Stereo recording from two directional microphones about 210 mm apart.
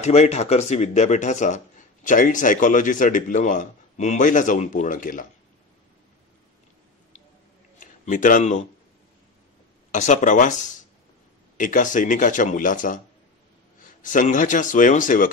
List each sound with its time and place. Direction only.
0.0 s speech: 30° left (ahead or behind)
7.8 s speech: 40° left (ahead or behind)
9.8 s a man's voice: 35° left (ahead or behind)